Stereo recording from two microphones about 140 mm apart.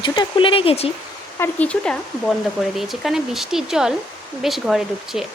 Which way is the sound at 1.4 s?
10° left (ahead or behind).